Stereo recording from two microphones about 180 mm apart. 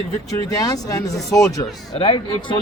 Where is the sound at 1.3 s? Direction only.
10° left (ahead or behind).